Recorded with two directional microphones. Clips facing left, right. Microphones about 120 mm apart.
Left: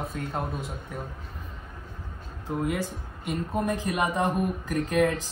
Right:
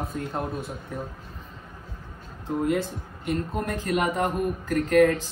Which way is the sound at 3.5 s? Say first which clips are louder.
Left 3 dB; 15° left (ahead or behind).